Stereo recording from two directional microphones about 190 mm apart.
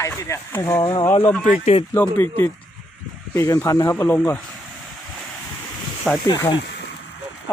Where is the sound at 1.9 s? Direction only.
10° left (ahead or behind).